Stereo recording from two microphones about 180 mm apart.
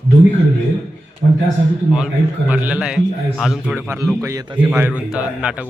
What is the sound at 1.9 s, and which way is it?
A man's voice, 5° right (ahead or behind).